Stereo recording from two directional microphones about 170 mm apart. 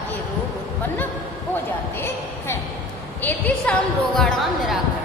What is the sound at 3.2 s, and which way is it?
A woman's voice, 10° left (ahead or behind).